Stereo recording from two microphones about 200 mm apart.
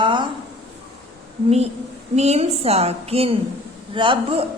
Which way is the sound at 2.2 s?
30° right (ahead or behind).